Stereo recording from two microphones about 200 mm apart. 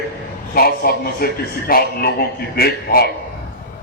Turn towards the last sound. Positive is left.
turn(degrees=50)  # may be behind; listen again after turning